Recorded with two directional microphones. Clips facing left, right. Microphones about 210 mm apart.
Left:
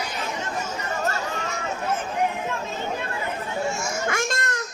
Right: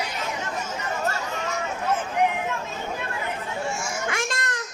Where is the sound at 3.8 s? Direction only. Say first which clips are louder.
Left 2 dB; 40° left (ahead or behind).